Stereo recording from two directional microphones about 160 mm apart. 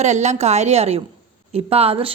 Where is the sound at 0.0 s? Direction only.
45° right (ahead or behind).